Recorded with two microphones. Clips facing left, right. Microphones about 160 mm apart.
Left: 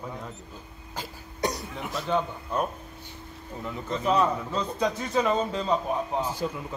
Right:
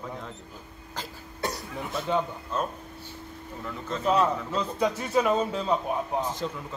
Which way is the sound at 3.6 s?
15° left (ahead or behind).